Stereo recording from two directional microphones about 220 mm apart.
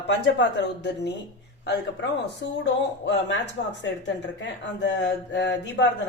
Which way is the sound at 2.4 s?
50° left (ahead or behind).